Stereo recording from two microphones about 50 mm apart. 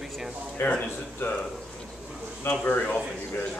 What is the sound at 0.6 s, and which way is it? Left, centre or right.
Speech, left.